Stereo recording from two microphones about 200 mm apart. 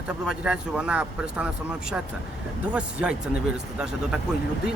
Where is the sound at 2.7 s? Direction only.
5° right (ahead or behind).